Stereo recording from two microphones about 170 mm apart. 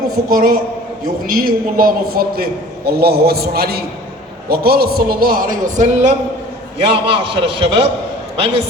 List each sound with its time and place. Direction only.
0.3 s a man's voice: 55° right (ahead or behind)
6.7 s a man's voice: 35° right (ahead or behind)